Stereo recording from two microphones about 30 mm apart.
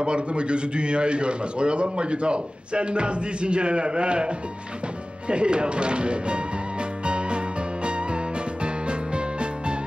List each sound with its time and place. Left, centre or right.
0.0 s a man's voice: right
5.3 s a man's voice: right
7.1 s music: right